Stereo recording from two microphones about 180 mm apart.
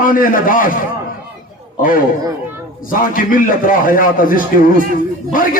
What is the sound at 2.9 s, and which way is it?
A man's voice, 50° left (ahead or behind).